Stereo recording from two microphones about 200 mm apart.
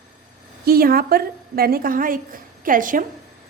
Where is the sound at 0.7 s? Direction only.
50° right (ahead or behind).